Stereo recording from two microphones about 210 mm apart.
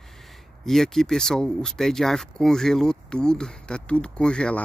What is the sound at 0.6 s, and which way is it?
Speech, centre (ahead or behind).